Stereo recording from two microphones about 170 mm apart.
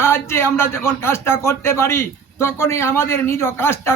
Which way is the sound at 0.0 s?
15° left (ahead or behind).